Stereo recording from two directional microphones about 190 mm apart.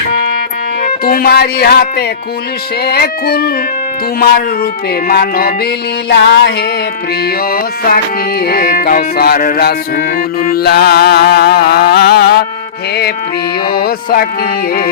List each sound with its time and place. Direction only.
1.0 s music: 50° left (ahead or behind)
5.0 s music: 50° left (ahead or behind)
6.1 s music: 60° left (ahead or behind)
7.5 s music: 50° left (ahead or behind)
13.7 s music: 50° left (ahead or behind)